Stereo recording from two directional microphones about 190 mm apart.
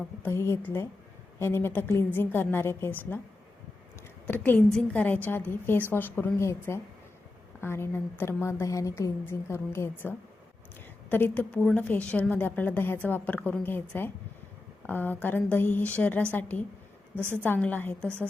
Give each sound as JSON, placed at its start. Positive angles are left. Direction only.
{"t": 0.2, "sound": "a woman's voice", "side_deg": 15}
{"t": 4.3, "sound": "a woman's voice", "side_deg": 10}